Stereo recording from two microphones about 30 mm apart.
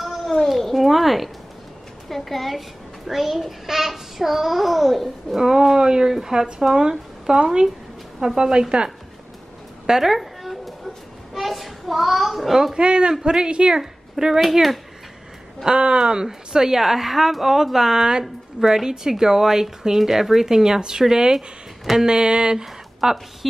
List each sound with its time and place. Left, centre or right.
0.0 s a sound: centre
0.5 s cat: centre
0.7 s a child's voice: centre
5.4 s a child's voice: centre
9.8 s a sound: centre
11.4 s a woman's voice: centre
12.7 s a man's voice: right
13.7 s speech: centre
14.4 s a child's voice: centre
15.6 s a man's voice: right
23.0 s a child's voice: centre